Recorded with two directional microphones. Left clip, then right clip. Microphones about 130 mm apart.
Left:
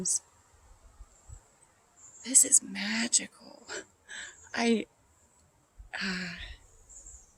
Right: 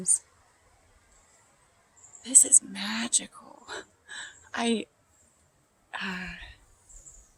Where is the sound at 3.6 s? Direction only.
25° left (ahead or behind).